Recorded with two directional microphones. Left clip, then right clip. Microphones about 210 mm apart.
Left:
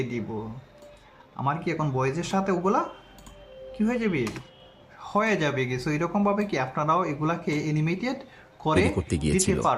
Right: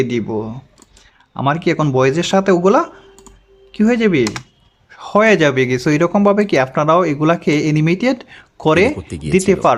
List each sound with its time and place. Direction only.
1.4 s speech: 40° right (ahead or behind)
9.0 s speech: centre (ahead or behind)